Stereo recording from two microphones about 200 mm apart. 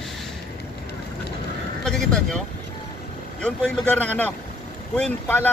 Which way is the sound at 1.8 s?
5° left (ahead or behind).